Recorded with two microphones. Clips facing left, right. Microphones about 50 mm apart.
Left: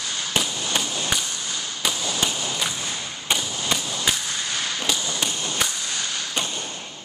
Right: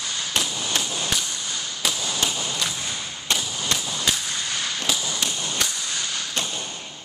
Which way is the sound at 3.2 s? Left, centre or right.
Centre.